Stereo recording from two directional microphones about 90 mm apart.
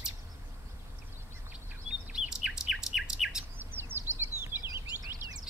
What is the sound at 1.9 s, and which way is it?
Chirp, 10° right (ahead or behind).